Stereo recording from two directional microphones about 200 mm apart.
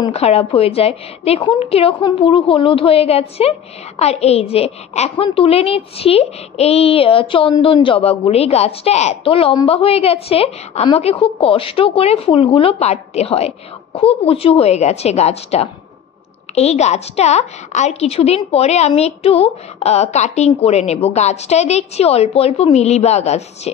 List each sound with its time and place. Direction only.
0.0 s a woman's voice: 30° left (ahead or behind)